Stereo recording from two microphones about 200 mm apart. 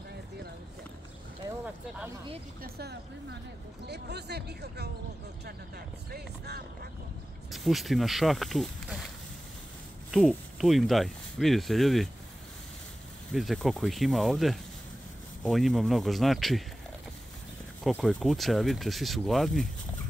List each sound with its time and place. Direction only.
2.6 s speech: 55° right (ahead or behind)
7.5 s speech: centre (ahead or behind)
10.1 s speech: centre (ahead or behind)
13.3 s speech: centre (ahead or behind)
17.8 s speech: centre (ahead or behind)